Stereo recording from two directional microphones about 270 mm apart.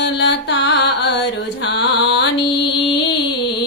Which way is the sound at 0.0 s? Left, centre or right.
Left.